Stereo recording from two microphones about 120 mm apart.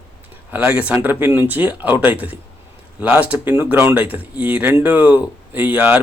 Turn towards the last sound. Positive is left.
turn(degrees=-15)  # may be behind; listen again after turning